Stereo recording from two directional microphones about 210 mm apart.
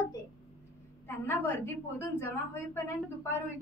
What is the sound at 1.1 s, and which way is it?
A woman's voice, 10° left (ahead or behind).